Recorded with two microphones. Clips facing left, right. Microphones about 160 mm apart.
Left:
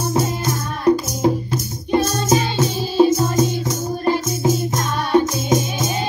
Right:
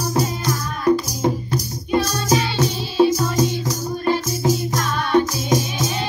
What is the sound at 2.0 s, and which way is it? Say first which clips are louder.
Music: left 2 dB; 20° left (ahead or behind).